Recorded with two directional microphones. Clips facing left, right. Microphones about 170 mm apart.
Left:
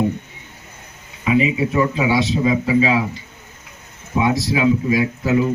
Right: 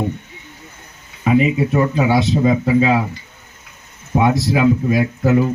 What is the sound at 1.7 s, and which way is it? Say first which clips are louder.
Speech: right 2 dB; 55° right (ahead or behind).